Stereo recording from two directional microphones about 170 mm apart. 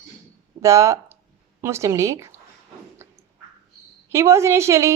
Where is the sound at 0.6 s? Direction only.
15° right (ahead or behind).